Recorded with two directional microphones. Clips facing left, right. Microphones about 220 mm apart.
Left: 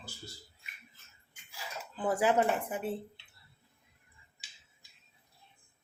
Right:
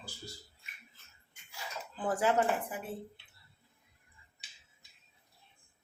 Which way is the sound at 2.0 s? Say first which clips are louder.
Left 2 dB; 15° left (ahead or behind).